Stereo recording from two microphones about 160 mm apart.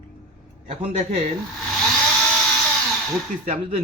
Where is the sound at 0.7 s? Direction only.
40° right (ahead or behind).